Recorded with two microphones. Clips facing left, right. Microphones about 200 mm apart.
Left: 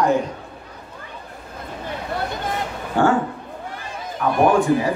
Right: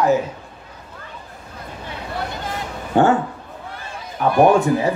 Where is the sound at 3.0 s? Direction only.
20° right (ahead or behind).